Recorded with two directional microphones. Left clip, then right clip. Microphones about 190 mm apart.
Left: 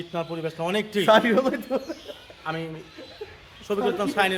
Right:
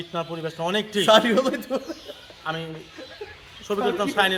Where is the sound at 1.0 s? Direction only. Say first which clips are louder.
Right 1 dB; 15° right (ahead or behind).